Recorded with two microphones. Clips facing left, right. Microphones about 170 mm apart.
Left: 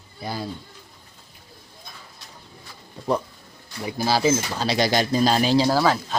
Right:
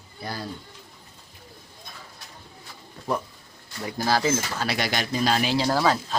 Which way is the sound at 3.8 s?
10° left (ahead or behind).